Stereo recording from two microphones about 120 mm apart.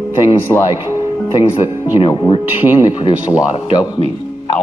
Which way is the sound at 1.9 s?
45° left (ahead or behind).